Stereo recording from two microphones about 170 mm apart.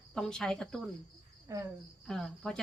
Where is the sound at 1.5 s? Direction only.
20° right (ahead or behind).